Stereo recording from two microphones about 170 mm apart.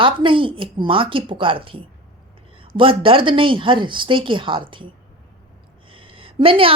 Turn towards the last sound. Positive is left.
turn(degrees=-30)  # may be behind; listen again after turning